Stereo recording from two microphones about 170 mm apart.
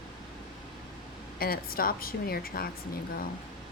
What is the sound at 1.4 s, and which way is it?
Speech, 60° left (ahead or behind).